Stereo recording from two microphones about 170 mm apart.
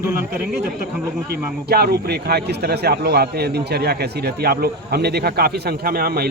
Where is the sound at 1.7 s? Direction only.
70° right (ahead or behind).